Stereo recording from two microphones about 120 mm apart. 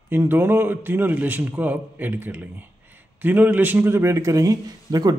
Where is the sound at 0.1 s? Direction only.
20° right (ahead or behind).